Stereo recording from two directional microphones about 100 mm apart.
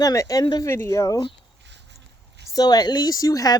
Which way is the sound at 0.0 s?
35° left (ahead or behind).